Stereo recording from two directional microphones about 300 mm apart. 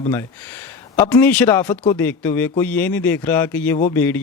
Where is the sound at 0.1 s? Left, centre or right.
Centre.